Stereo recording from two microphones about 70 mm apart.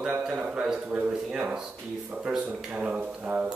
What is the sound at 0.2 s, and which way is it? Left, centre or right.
Speech, centre.